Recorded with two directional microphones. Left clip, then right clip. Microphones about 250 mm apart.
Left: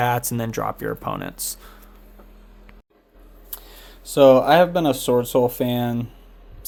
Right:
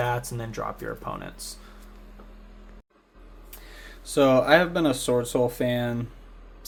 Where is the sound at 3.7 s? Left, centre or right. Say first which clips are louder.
Left 6 dB; centre.